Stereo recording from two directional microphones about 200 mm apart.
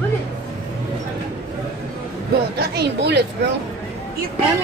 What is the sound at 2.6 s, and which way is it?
Speech, 55° right (ahead or behind).